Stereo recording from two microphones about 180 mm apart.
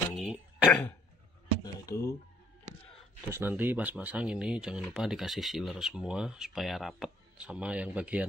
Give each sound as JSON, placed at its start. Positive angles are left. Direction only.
{"t": 0.1, "sound": "throat clearing", "side_deg": -5}
{"t": 1.6, "sound": "a sound", "side_deg": 15}
{"t": 3.3, "sound": "speech", "side_deg": -10}